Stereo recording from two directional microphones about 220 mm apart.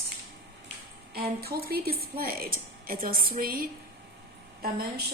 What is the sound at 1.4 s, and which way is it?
A woman's voice, 45° right (ahead or behind).